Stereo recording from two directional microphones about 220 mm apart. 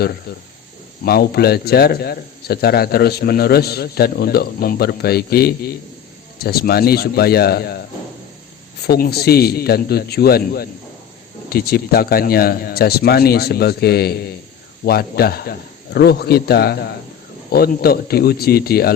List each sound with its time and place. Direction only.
0.3 s a man's voice: 45° left (ahead or behind)
8.9 s a man's voice: 45° left (ahead or behind)